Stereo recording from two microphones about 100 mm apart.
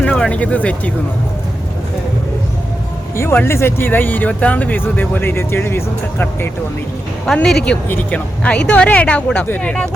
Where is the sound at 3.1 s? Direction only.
25° left (ahead or behind).